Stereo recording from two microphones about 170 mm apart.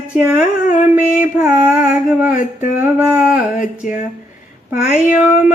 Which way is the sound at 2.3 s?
50° left (ahead or behind).